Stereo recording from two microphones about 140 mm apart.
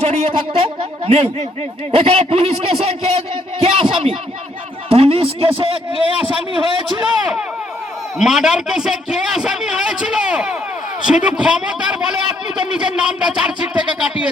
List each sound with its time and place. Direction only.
0.0 s a man's voice: 55° right (ahead or behind)
8.2 s a man's voice: 5° right (ahead or behind)